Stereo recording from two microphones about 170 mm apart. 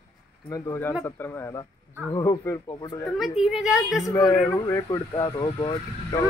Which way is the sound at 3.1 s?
Centre (ahead or behind).